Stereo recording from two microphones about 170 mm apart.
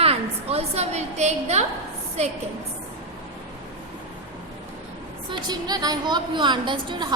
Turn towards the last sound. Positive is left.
turn(degrees=-25)  # may be behind; listen again after turning